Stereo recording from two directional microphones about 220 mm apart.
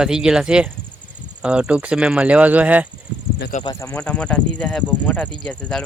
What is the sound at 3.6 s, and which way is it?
Speech, 20° left (ahead or behind).